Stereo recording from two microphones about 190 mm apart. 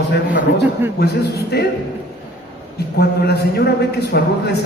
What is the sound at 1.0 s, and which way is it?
Speech, 60° left (ahead or behind).